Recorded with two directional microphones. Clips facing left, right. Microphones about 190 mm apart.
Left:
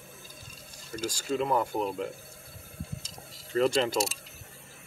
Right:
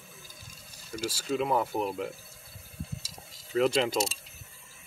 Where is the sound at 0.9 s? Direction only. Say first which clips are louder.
Even; 10° right (ahead or behind).